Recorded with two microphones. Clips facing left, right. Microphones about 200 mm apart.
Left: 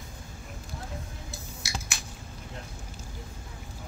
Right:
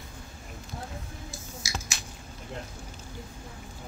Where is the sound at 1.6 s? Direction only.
60° left (ahead or behind).